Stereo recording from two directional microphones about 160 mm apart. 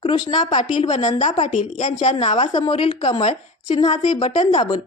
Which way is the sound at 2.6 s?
35° left (ahead or behind).